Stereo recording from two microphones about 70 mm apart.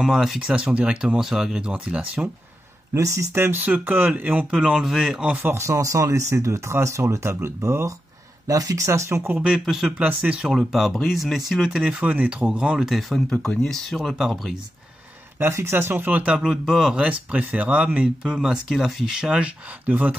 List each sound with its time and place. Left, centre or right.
0.0 s speech: centre
0.4 s speech: centre
2.9 s speech: right
3.6 s speech: right
4.5 s speech: centre
5.4 s speech: right
5.7 s speech: right
8.5 s speech: right
9.3 s speech: centre
10.7 s speech: centre
13.1 s speech: centre
15.3 s speech: right
16.3 s speech: centre